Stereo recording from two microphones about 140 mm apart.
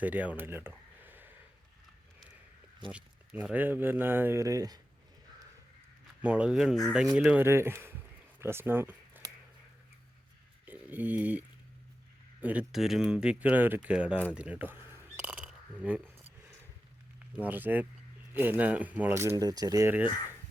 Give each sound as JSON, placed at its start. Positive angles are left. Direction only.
{"t": 0.0, "sound": "speech", "side_deg": -10}
{"t": 2.9, "sound": "speech", "side_deg": -10}
{"t": 6.2, "sound": "speech", "side_deg": -5}
{"t": 10.7, "sound": "speech", "side_deg": -10}
{"t": 14.3, "sound": "a sound", "side_deg": -10}
{"t": 17.3, "sound": "speech", "side_deg": -10}